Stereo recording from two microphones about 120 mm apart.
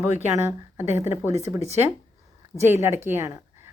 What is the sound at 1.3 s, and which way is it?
Speech, 65° right (ahead or behind).